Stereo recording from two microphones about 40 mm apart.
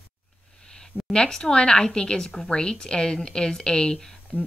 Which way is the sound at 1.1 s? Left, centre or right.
Centre.